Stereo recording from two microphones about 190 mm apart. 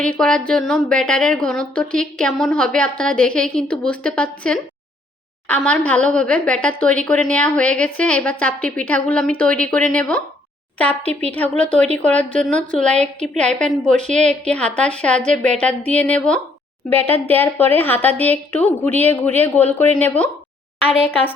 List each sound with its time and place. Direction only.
0.0 s a woman's voice: 5° left (ahead or behind)
13.9 s a woman's voice: 40° right (ahead or behind)
14.3 s a woman's voice: 5° left (ahead or behind)